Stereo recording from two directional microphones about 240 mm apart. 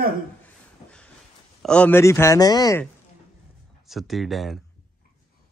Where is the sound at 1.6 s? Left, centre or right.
Centre.